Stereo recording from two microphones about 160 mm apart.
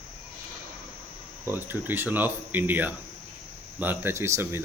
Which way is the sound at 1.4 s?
10° right (ahead or behind).